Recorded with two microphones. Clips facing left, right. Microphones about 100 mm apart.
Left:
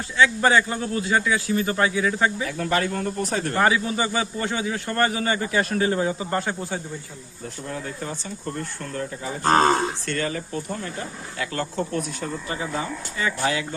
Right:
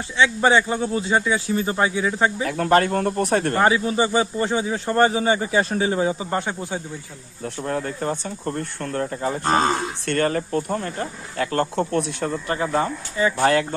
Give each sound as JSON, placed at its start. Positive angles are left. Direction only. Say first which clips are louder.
{"t": 0.2, "sound": "speech", "louder": "right 1 dB", "side_deg": -20}
{"t": 2.4, "sound": "speech", "louder": "right 6 dB", "side_deg": -45}
{"t": 3.6, "sound": "speech", "louder": "even", "side_deg": -30}
{"t": 7.4, "sound": "speech", "louder": "right 6 dB", "side_deg": -55}